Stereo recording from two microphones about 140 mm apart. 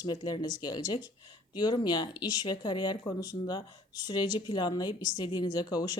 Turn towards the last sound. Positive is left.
turn(degrees=30)  # may be behind; listen again after turning